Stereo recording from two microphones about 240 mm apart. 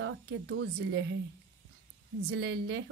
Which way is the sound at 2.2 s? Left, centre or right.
Right.